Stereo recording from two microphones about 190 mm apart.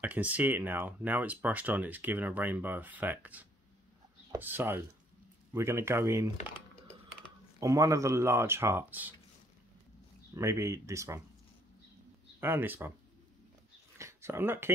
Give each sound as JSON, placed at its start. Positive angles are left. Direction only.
{"t": 0.0, "sound": "speech", "side_deg": -10}
{"t": 7.6, "sound": "speech", "side_deg": -15}
{"t": 10.3, "sound": "speech", "side_deg": -15}
{"t": 12.4, "sound": "speech", "side_deg": -10}
{"t": 13.9, "sound": "a sound", "side_deg": -15}